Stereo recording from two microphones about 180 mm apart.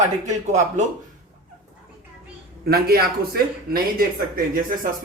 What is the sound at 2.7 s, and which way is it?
Speech, 55° right (ahead or behind).